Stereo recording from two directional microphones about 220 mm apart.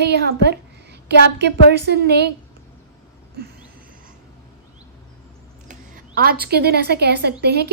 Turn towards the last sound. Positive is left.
turn(degrees=-45)  # may be behind; listen again after turning